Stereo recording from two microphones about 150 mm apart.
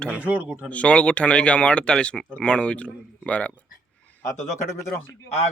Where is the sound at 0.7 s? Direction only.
10° left (ahead or behind).